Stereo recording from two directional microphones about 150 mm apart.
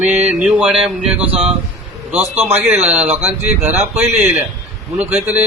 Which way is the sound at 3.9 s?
5° right (ahead or behind).